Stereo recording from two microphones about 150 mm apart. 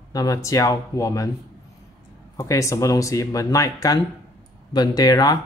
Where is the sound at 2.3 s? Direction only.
20° left (ahead or behind).